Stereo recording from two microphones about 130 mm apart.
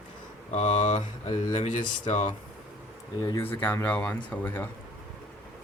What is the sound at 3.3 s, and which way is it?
Speech, 15° left (ahead or behind).